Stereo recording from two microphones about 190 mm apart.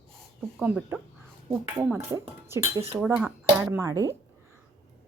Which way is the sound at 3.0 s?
10° right (ahead or behind).